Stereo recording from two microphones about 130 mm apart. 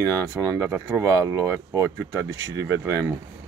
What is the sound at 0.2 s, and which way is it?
Speech, 25° right (ahead or behind).